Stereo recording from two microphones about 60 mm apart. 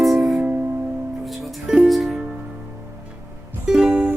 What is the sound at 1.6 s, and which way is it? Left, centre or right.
Music, centre.